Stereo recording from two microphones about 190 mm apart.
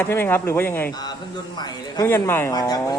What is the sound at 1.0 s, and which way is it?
A woman's voice, 20° left (ahead or behind).